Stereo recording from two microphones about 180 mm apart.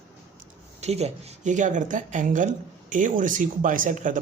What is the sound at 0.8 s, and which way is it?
Speech, 35° right (ahead or behind).